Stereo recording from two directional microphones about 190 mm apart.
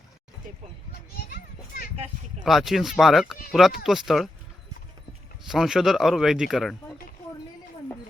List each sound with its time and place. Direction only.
1.3 s children playing: 50° left (ahead or behind)
2.4 s a man's voice: centre (ahead or behind)
5.5 s a man's voice: centre (ahead or behind)